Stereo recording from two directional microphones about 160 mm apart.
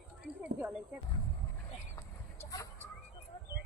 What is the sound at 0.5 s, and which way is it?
Speech, 10° right (ahead or behind).